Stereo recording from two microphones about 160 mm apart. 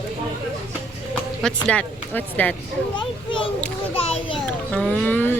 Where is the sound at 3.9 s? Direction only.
40° left (ahead or behind).